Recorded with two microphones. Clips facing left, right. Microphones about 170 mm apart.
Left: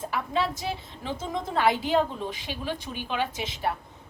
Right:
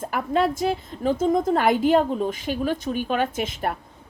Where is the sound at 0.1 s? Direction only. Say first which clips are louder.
Right 7 dB; 50° right (ahead or behind).